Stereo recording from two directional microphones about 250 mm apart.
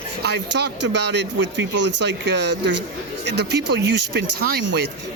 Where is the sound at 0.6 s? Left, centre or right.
Right.